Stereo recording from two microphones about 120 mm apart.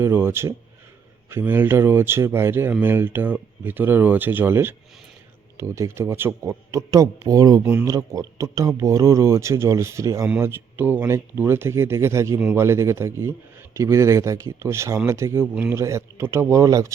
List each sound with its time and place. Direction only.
0.0 s speech: 20° right (ahead or behind)